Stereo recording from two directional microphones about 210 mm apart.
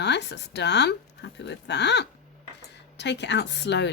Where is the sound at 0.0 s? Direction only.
55° left (ahead or behind).